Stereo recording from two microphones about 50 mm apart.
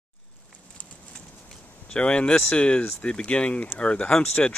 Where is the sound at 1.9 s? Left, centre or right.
Left.